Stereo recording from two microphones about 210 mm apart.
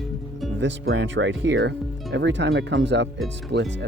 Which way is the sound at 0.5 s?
60° right (ahead or behind).